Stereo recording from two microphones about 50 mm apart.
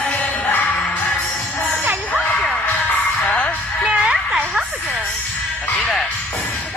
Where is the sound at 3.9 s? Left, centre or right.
Right.